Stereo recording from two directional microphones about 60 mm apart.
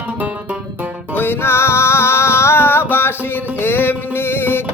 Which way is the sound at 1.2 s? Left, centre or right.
Left.